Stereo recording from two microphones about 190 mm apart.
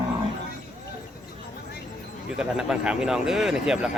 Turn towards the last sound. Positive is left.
turn(degrees=-5)  # may be behind; listen again after turning